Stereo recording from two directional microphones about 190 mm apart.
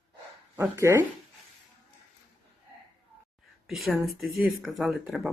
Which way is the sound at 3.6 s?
Centre (ahead or behind).